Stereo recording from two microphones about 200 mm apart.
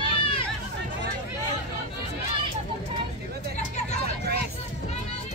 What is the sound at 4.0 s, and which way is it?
Vehicle, 50° right (ahead or behind).